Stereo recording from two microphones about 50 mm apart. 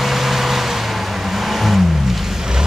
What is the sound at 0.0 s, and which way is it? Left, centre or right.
Vehicle, centre.